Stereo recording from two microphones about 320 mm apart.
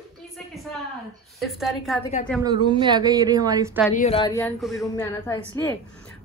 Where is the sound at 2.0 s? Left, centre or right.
Left.